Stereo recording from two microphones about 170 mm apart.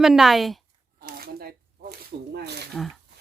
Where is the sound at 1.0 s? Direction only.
65° right (ahead or behind).